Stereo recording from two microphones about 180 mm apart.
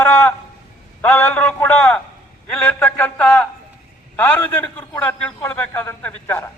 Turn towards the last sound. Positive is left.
turn(degrees=10)  # may be behind; listen again after turning